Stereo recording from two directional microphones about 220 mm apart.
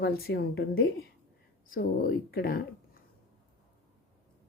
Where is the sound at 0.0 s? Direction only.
45° left (ahead or behind).